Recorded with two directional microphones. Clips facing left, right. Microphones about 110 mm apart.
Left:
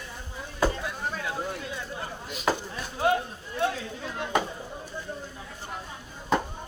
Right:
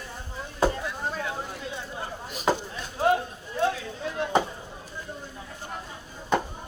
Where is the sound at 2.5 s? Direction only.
20° right (ahead or behind).